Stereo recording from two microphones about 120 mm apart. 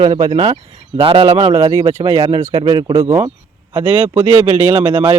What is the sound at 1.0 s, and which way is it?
Speech, 50° right (ahead or behind).